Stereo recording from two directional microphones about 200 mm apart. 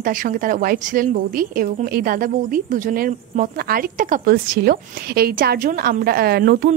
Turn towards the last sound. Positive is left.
turn(degrees=-50)  # may be behind; listen again after turning